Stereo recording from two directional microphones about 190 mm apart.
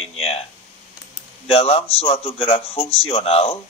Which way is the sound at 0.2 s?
30° left (ahead or behind).